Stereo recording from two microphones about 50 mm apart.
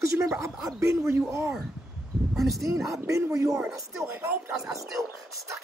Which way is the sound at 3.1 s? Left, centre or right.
Right.